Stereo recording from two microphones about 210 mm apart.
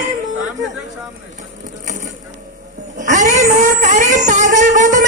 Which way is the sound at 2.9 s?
35° right (ahead or behind).